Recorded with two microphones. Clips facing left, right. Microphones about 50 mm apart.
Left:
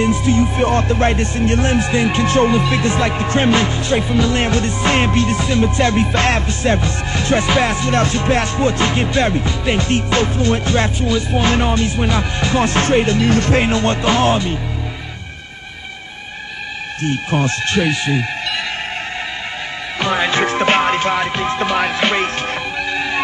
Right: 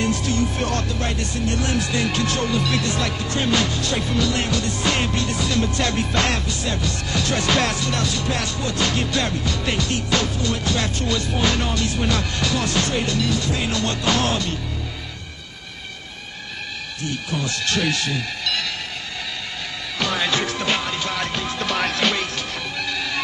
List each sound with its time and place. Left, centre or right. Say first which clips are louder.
0.0 s speech: left 7 dB; left
4.3 s music: left 6 dB; left
11.0 s music: left 5 dB; centre
11.3 s music: left 7 dB; left
13.3 s speech: left 9 dB; left
13.7 s speech: left 6 dB; left
17.0 s music: left 9 dB; left
20.0 s music: left 6 dB; left